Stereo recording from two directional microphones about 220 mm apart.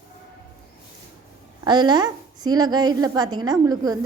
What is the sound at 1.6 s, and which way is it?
A woman's voice, 20° right (ahead or behind).